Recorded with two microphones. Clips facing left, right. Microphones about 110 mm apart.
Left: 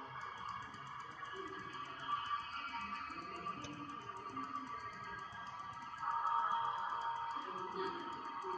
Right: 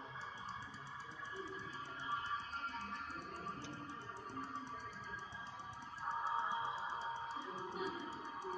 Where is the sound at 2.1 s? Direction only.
50° left (ahead or behind).